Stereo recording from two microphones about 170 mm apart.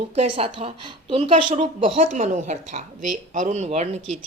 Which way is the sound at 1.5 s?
45° right (ahead or behind).